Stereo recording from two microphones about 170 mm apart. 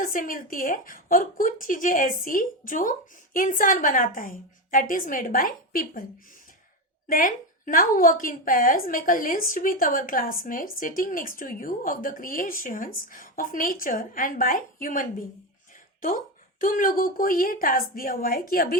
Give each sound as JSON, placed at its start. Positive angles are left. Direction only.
{"t": 0.0, "sound": "a woman's voice", "side_deg": 55}
{"t": 7.1, "sound": "a woman's voice", "side_deg": 50}